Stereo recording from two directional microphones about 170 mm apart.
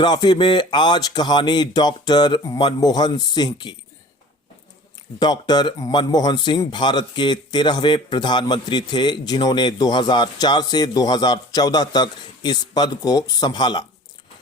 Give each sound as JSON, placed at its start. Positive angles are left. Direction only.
{"t": 0.0, "sound": "speech", "side_deg": 25}
{"t": 5.2, "sound": "speech", "side_deg": 25}